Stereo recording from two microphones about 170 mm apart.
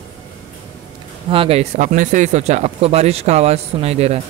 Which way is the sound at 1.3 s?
35° right (ahead or behind).